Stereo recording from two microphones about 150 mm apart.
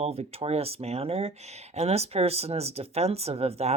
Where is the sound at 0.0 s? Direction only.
45° right (ahead or behind).